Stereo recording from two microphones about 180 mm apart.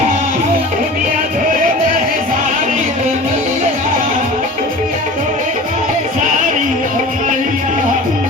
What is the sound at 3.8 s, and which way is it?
Music, 45° right (ahead or behind).